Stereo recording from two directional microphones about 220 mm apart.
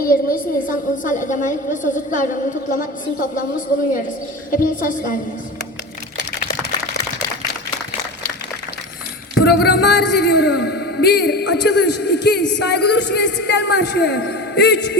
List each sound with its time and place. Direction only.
0.0 s a woman's voice: 40° left (ahead or behind)
4.5 s a woman's voice: 40° left (ahead or behind)
9.3 s a man's voice: 45° left (ahead or behind)